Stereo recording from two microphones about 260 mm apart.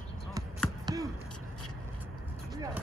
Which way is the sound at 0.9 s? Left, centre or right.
Centre.